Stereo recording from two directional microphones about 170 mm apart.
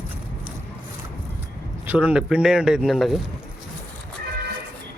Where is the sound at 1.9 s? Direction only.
5° right (ahead or behind).